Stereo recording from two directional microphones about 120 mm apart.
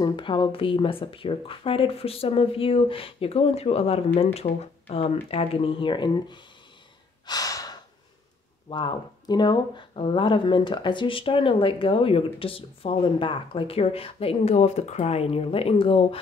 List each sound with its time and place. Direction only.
0.0 s speech: 40° left (ahead or behind)
7.2 s breathing: 30° left (ahead or behind)
8.6 s speech: 40° left (ahead or behind)